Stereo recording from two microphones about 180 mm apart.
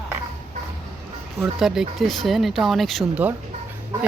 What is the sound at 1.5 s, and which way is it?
Speech, centre (ahead or behind).